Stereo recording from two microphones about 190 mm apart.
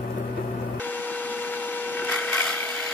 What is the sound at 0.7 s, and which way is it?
Wood, 10° left (ahead or behind).